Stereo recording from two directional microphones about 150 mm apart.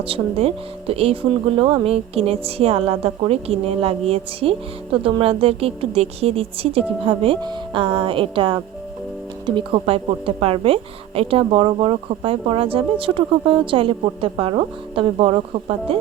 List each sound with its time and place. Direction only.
0.0 s speech: 40° right (ahead or behind)